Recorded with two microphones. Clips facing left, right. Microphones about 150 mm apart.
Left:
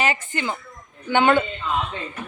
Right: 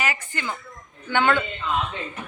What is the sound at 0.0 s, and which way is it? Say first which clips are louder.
A woman's voice: left 4 dB; 25° left (ahead or behind).